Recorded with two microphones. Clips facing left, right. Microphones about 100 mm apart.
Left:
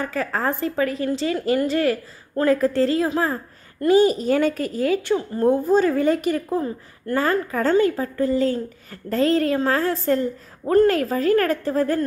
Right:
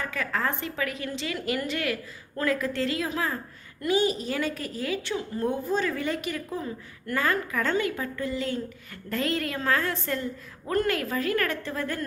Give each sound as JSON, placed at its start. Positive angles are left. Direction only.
{"t": 0.0, "sound": "a woman's voice", "side_deg": 35}